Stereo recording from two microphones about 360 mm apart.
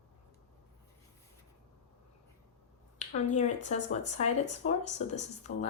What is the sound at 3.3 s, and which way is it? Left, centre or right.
Speech, centre.